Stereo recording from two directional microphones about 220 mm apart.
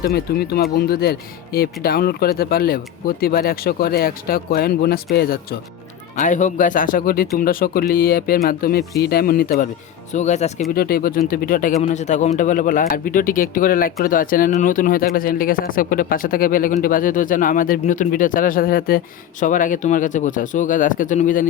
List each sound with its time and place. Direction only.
0.0 s speech: 45° left (ahead or behind)
10.8 s speech: 45° left (ahead or behind)